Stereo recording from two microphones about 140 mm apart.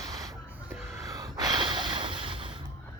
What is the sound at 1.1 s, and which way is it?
Gasp, 25° right (ahead or behind).